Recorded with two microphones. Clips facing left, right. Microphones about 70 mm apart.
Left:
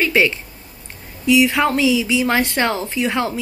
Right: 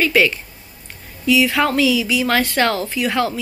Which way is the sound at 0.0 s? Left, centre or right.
Left.